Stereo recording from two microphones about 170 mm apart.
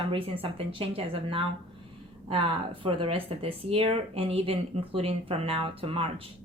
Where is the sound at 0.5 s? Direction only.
30° right (ahead or behind).